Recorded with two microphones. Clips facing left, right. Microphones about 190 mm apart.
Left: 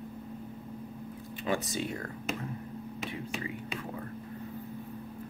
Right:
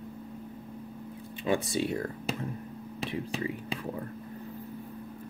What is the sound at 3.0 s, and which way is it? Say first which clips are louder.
Whispering: right 6 dB; 35° right (ahead or behind).